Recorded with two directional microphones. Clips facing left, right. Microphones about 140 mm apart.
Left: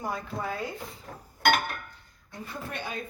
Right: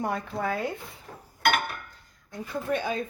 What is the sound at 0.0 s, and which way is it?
Speech, 65° right (ahead or behind).